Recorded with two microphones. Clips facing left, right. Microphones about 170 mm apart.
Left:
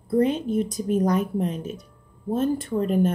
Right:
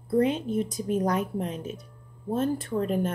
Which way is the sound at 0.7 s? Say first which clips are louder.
Left 4 dB; 5° right (ahead or behind).